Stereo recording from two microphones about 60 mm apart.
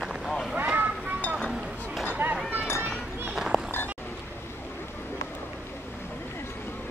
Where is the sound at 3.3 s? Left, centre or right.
Centre.